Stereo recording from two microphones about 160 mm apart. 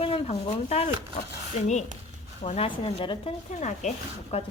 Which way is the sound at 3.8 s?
45° left (ahead or behind).